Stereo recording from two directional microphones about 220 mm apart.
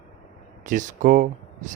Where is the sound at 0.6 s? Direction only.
35° right (ahead or behind).